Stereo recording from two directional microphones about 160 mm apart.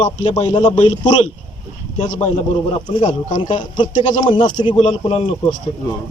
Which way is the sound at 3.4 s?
30° left (ahead or behind).